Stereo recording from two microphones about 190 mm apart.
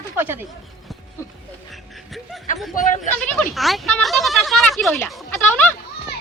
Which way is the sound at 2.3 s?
Centre (ahead or behind).